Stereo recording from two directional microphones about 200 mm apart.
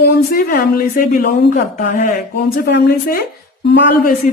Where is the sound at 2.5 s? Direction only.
50° left (ahead or behind).